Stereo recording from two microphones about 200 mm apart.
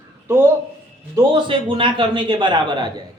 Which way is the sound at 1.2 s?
25° right (ahead or behind).